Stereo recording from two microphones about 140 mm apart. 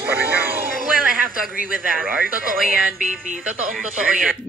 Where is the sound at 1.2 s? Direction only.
90° right.